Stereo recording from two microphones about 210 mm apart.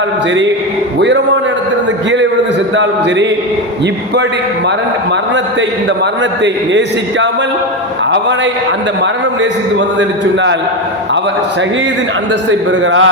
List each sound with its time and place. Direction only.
0.9 s speech: 55° right (ahead or behind)
6.4 s speech: 60° right (ahead or behind)
10.0 s speech: 60° right (ahead or behind)
12.5 s speech: 65° right (ahead or behind)